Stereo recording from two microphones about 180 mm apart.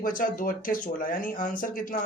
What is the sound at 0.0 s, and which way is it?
Speech, 50° left (ahead or behind).